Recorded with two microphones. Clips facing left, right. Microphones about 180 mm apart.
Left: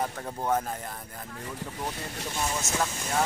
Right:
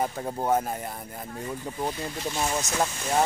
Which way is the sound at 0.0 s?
20° right (ahead or behind).